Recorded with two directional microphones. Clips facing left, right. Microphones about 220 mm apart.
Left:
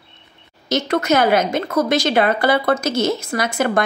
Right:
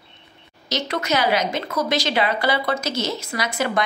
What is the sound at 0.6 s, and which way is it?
Speech, 50° left (ahead or behind).